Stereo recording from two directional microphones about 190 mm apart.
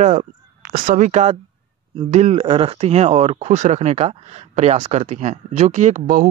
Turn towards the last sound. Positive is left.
turn(degrees=-45)  # may be behind; listen again after turning